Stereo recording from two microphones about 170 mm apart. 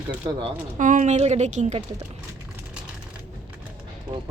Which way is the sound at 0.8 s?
50° right (ahead or behind).